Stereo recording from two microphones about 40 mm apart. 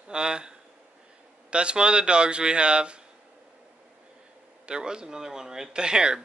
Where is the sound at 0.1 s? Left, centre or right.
Centre.